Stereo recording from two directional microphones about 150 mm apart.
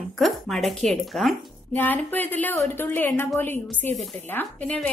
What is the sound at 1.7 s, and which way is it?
A woman's voice, 15° left (ahead or behind).